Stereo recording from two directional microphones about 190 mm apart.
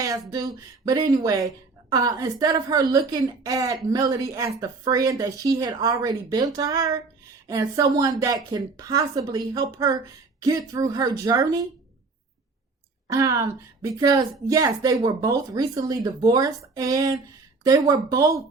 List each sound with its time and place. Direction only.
0.3 s a woman's voice: 20° right (ahead or behind)
13.1 s a woman's voice: 15° right (ahead or behind)